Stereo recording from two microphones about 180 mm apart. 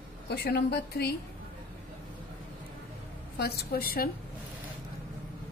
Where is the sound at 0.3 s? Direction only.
65° left (ahead or behind).